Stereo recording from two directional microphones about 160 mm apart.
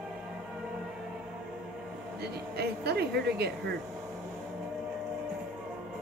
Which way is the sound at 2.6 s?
90° right.